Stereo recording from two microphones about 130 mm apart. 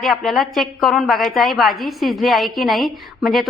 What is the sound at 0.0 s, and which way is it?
A woman's voice, centre (ahead or behind).